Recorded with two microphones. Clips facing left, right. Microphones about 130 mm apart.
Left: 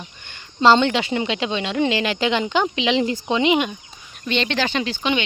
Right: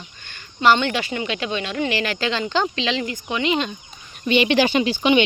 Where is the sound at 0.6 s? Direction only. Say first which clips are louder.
Left 2 dB; 25° left (ahead or behind).